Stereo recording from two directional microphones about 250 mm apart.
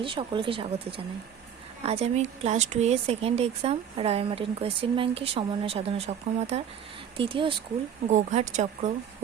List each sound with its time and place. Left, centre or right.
0.0 s speech: centre